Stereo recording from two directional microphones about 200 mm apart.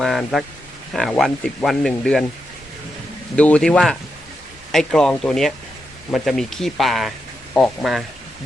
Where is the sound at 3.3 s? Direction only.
5° left (ahead or behind).